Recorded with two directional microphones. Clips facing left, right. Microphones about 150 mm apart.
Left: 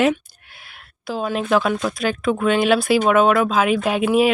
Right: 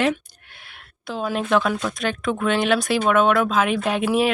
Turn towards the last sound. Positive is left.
turn(degrees=5)  # may be behind; listen again after turning